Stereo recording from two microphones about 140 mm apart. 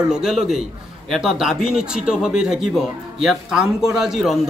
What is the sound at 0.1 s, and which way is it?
A man's voice, 5° right (ahead or behind).